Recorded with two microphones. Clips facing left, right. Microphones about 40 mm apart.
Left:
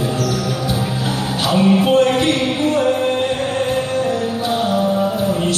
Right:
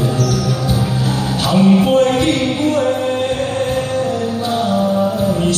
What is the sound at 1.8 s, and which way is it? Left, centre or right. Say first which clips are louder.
Music: right 1 dB; left.